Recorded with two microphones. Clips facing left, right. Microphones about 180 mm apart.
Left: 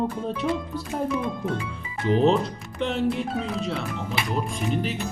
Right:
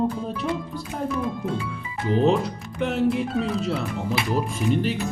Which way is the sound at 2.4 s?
5° right (ahead or behind).